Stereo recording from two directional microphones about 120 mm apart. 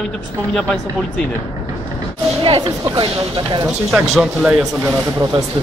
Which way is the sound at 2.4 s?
45° right (ahead or behind).